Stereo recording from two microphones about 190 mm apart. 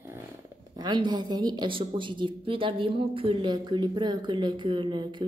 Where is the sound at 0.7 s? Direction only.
20° right (ahead or behind).